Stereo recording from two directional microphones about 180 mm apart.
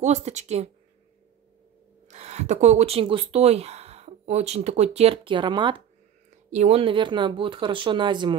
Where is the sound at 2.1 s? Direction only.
40° right (ahead or behind).